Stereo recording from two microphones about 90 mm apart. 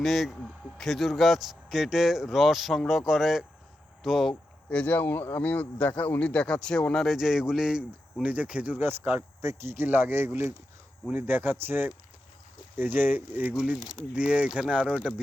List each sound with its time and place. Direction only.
0.0 s speech: centre (ahead or behind)
4.7 s a man's voice: 15° left (ahead or behind); by 15.1 s 15° right (ahead or behind)